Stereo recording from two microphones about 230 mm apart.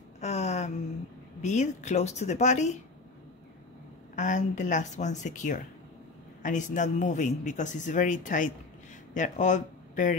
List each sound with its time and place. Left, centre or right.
0.2 s a sound: left
1.4 s speech: left
4.1 s speech: left